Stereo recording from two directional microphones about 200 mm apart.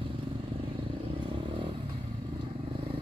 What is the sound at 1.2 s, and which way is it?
Vehicle, 25° right (ahead or behind).